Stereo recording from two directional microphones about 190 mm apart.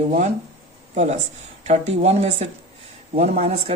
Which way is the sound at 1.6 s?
35° right (ahead or behind).